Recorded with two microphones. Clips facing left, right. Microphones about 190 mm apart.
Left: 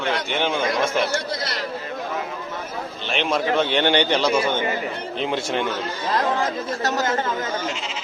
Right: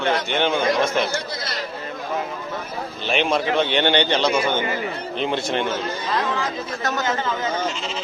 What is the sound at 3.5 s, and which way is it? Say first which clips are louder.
Speech: left 1 dB; 5° left (ahead or behind).